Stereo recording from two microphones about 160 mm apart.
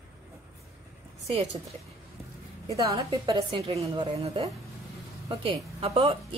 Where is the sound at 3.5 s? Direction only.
35° right (ahead or behind).